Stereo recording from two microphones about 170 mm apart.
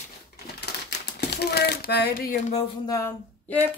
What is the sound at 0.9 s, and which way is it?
Typewriter, 75° left (ahead or behind).